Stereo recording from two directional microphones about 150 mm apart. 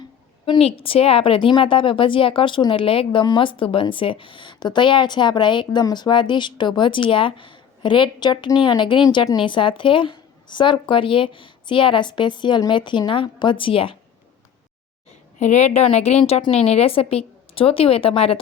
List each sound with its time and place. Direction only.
0.4 s a woman's voice: 35° left (ahead or behind)
15.4 s a woman's voice: 50° left (ahead or behind)